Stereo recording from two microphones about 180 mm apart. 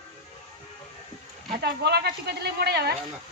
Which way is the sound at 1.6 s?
65° right (ahead or behind).